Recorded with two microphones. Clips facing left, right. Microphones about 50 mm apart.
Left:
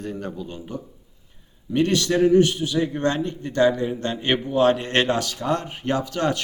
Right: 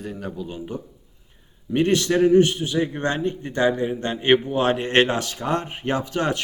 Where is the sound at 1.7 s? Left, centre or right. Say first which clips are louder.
Right 1 dB; right.